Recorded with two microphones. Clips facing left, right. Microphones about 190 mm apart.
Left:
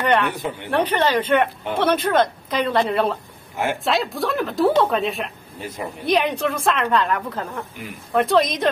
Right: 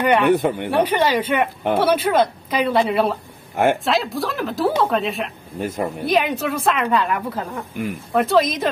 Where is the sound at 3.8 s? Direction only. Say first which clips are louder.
Right 1 dB; centre (ahead or behind).